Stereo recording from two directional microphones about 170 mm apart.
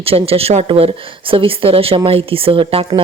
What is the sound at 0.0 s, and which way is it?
Speech, 35° right (ahead or behind).